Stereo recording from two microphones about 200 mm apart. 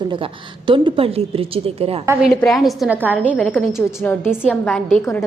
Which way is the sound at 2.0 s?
10° right (ahead or behind).